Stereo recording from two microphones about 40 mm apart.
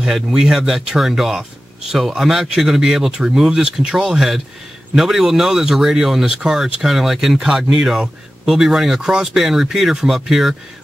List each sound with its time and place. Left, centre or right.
0.1 s speech: centre